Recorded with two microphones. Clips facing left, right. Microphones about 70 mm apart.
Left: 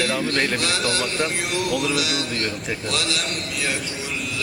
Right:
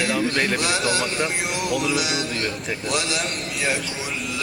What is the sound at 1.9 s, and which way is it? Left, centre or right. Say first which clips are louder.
A man's voice: even; centre.